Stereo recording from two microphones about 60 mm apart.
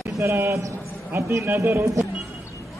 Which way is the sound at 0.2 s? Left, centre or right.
Right.